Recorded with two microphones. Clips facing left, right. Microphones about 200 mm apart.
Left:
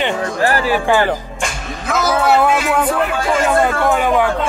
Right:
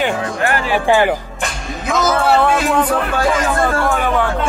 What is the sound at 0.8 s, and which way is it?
Speech, 15° right (ahead or behind).